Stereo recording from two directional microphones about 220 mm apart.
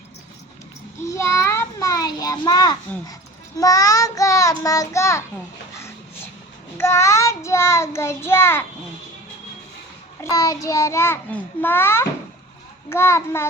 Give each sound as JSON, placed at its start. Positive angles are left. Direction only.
{"t": 1.0, "sound": "a sound", "side_deg": 15}
{"t": 3.6, "sound": "a child's voice", "side_deg": 15}
{"t": 6.7, "sound": "a child's voice", "side_deg": 10}
{"t": 10.2, "sound": "a child's voice", "side_deg": 15}